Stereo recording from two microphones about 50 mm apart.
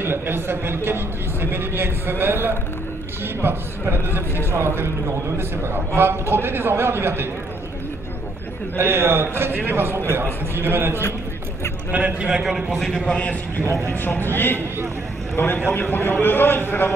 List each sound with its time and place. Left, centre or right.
0.0 s a man's voice: right
8.7 s speech: right
12.2 s a man's voice: centre
12.4 s a man's voice: centre
13.1 s a man's voice: left
13.8 s a man's voice: left